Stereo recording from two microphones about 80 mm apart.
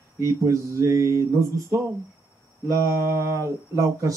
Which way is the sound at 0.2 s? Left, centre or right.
Right.